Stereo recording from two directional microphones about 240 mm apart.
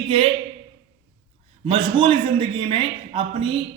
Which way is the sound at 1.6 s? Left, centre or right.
Right.